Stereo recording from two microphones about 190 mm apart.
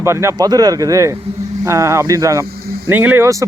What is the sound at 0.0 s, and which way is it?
Speech, 15° right (ahead or behind).